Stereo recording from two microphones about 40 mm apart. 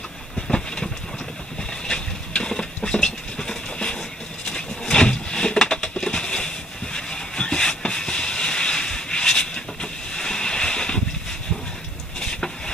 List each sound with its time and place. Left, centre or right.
0.4 s train: centre
1.9 s a sound: centre
12.2 s vehicle: centre